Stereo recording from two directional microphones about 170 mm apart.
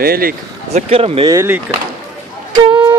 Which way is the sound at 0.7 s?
35° right (ahead or behind).